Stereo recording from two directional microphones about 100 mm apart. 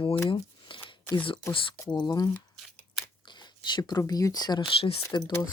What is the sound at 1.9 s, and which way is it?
Speech, 45° left (ahead or behind).